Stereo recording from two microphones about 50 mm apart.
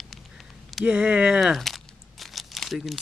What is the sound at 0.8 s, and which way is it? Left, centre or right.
Speech, right.